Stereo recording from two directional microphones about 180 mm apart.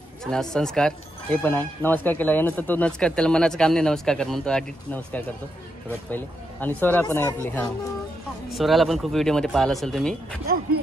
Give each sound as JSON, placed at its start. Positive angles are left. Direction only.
{"t": 0.2, "sound": "speech", "side_deg": 5}
{"t": 10.4, "sound": "speech", "side_deg": -55}